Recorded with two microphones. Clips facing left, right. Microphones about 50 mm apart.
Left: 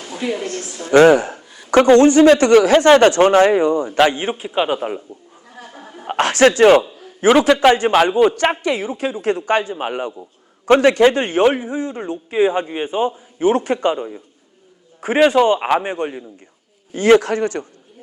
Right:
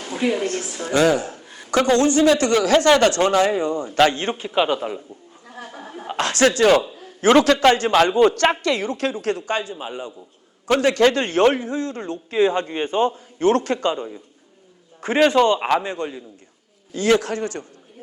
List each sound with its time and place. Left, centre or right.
0.1 s a sound: centre
0.3 s a woman's voice: centre
0.9 s a man's voice: left
4.0 s speech: centre
5.5 s a sound: centre
6.1 s speech: left
7.2 s speech: centre
9.2 s speech: left
9.7 s a man's voice: left
10.7 s speech: left
11.0 s a man's voice: centre